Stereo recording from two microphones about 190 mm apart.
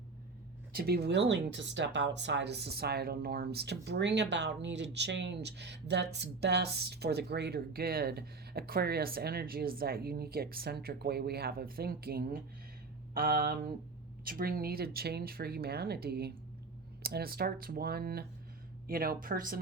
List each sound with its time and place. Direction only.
0.7 s speech: 55° right (ahead or behind)